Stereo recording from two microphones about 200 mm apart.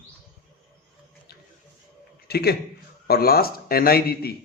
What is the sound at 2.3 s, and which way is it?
A man's voice, 55° left (ahead or behind).